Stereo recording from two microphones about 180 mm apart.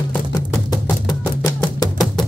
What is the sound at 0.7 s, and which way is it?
Music, 20° left (ahead or behind).